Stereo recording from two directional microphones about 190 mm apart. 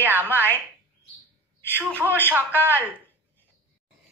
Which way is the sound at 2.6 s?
10° right (ahead or behind).